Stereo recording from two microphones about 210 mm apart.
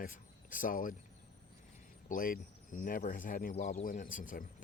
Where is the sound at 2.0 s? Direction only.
40° left (ahead or behind).